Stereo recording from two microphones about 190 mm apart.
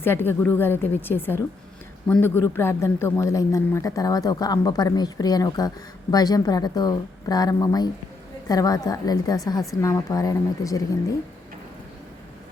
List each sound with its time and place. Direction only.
0.0 s a woman's voice: 10° left (ahead or behind)